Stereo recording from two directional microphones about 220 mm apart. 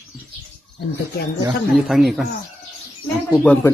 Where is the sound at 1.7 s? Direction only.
Centre (ahead or behind).